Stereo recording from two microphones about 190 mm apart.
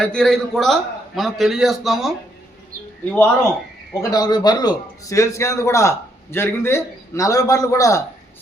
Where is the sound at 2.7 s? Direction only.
50° right (ahead or behind).